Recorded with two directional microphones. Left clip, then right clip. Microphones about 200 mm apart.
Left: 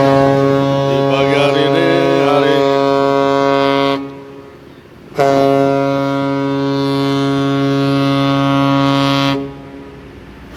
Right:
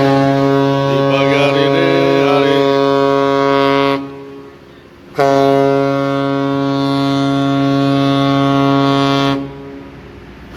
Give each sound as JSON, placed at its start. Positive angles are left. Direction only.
{"t": 0.2, "sound": "foghorn", "side_deg": 40}
{"t": 1.5, "sound": "mantra", "side_deg": 15}
{"t": 2.5, "sound": "music", "side_deg": 50}
{"t": 5.1, "sound": "a sound", "side_deg": 45}
{"t": 6.6, "sound": "music", "side_deg": 5}